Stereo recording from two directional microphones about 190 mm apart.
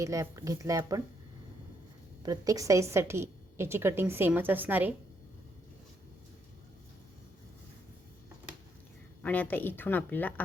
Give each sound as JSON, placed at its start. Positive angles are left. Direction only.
{"t": 0.0, "sound": "a woman's voice", "side_deg": -15}
{"t": 2.2, "sound": "a woman's voice", "side_deg": -20}
{"t": 9.2, "sound": "speech", "side_deg": 10}